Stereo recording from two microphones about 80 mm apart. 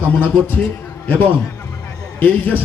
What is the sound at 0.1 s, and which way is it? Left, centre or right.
Speech, left.